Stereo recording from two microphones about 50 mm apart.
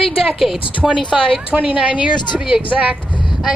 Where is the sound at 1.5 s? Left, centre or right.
Right.